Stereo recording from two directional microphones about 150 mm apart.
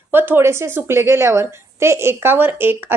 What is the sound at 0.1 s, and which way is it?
A woman's voice, 15° right (ahead or behind).